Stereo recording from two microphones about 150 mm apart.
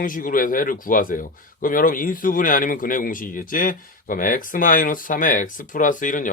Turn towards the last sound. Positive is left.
turn(degrees=60)  # may be behind; listen again after turning